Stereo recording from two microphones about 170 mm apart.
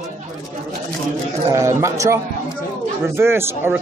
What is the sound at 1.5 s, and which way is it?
Speech, 15° right (ahead or behind).